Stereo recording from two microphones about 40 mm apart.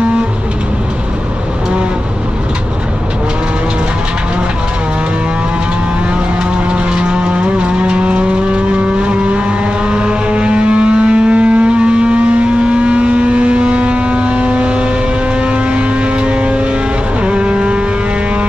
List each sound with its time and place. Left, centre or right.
6.9 s vehicle: right
17.2 s vehicle: right